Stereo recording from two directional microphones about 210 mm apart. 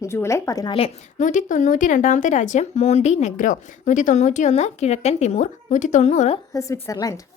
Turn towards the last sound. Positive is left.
turn(degrees=15)  # may be behind; listen again after turning